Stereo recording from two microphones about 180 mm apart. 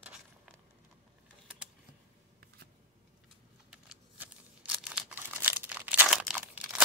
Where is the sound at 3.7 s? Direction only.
5° right (ahead or behind).